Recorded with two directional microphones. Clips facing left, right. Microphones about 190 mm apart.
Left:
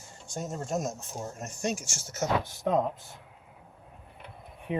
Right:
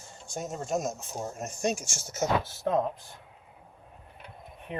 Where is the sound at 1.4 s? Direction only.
15° right (ahead or behind).